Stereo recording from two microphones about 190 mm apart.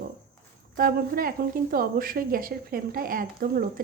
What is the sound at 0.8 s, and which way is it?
A woman's voice, 50° right (ahead or behind).